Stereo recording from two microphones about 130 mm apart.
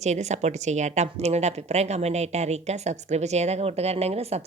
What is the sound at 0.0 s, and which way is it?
A woman's voice, 60° right (ahead or behind).